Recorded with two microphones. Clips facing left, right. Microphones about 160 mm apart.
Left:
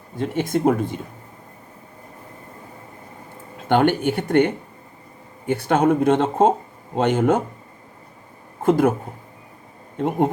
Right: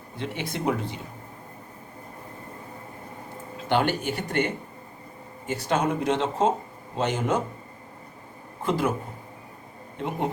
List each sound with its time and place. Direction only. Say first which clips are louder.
0.2 s speech: left 10 dB; 45° left (ahead or behind)
3.7 s speech: left 7 dB; 55° left (ahead or behind)
8.6 s speech: left 8 dB; 50° left (ahead or behind)
10.0 s speech: left 9 dB; 50° left (ahead or behind)